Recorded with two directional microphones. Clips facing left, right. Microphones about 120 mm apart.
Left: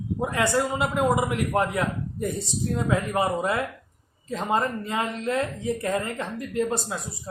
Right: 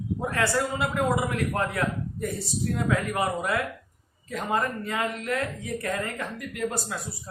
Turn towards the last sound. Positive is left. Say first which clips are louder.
# left 4 dB
turn(degrees=25)  # may be behind; listen again after turning